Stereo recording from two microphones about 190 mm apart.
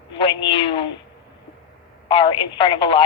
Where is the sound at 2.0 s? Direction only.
25° left (ahead or behind).